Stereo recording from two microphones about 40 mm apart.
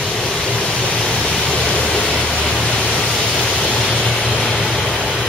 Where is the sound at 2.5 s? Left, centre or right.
Centre.